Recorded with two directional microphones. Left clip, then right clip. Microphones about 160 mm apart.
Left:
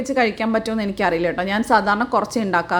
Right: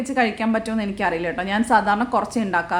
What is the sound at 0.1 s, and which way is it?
A woman's voice, 15° left (ahead or behind).